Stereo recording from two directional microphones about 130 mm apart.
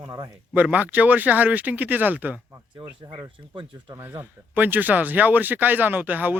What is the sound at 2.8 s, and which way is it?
Speech, 45° right (ahead or behind).